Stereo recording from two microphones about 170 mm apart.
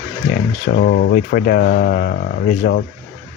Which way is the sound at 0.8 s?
70° left (ahead or behind).